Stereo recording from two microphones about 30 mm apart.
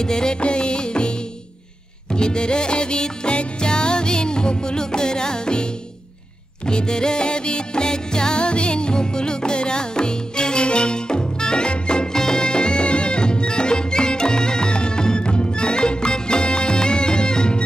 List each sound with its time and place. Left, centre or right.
0.0 s music: left
2.1 s music: left
12.1 s music: left